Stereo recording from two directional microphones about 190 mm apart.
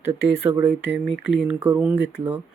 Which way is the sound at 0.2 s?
60° left (ahead or behind).